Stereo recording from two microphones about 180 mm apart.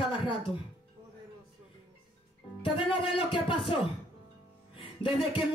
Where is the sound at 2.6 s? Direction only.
30° left (ahead or behind).